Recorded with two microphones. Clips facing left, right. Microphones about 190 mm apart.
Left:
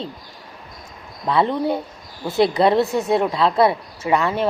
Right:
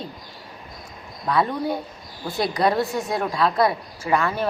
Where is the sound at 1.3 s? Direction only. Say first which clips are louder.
Left 3 dB; 25° left (ahead or behind).